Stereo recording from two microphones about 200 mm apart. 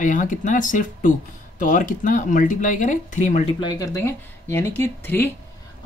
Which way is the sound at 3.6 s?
20° left (ahead or behind).